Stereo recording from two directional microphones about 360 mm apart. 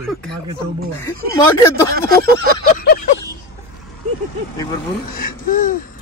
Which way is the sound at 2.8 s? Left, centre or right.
Left.